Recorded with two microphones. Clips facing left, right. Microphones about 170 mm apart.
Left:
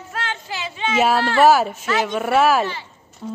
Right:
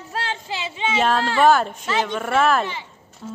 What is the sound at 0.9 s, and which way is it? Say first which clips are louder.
Speech: left 3 dB; 10° left (ahead or behind).